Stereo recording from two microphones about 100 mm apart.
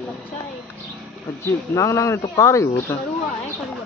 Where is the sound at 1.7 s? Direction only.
30° left (ahead or behind).